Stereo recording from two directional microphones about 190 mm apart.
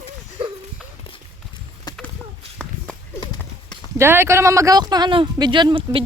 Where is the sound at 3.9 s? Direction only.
15° right (ahead or behind).